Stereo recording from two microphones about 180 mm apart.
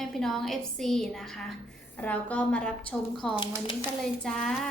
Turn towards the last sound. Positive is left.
turn(degrees=5)  # may be behind; listen again after turning